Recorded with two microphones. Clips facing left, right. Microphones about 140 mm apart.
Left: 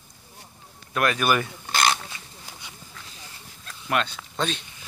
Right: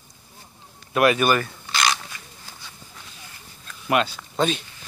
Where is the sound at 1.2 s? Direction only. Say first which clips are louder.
Right 2 dB; 10° left (ahead or behind).